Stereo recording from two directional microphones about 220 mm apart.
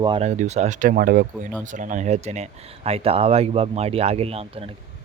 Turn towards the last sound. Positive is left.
turn(degrees=-25)  # may be behind; listen again after turning